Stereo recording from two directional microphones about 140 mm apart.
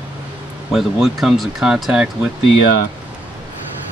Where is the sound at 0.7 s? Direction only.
Centre (ahead or behind).